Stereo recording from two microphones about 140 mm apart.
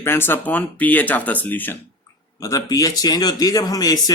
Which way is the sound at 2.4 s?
25° left (ahead or behind).